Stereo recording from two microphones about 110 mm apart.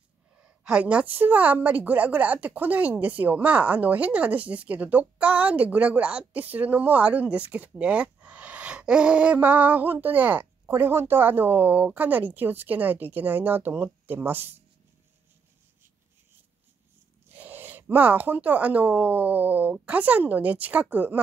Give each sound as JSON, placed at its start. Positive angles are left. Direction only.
{"t": 0.4, "sound": "a woman's voice", "side_deg": -10}
{"t": 17.3, "sound": "a woman's voice", "side_deg": -15}